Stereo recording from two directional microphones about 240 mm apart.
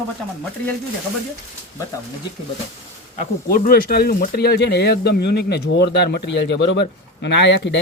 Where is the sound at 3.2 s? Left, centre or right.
Left.